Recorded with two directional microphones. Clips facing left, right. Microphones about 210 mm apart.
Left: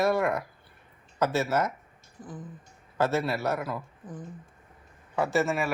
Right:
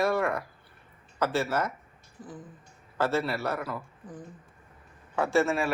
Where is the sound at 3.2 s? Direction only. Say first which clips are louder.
Left 2 dB; 10° left (ahead or behind).